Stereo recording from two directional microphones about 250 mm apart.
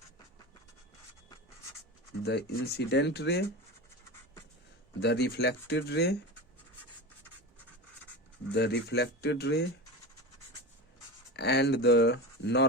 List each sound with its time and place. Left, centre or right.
2.2 s speech: left
4.9 s speech: left
8.5 s speech: left
11.3 s speech: left